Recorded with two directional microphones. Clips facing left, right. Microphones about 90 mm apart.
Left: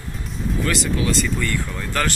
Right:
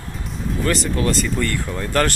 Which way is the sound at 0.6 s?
45° right (ahead or behind).